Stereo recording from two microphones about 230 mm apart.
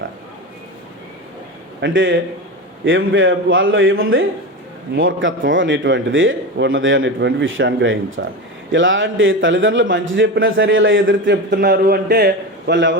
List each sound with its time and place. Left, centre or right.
1.8 s a man's voice: right
11.5 s a man's voice: right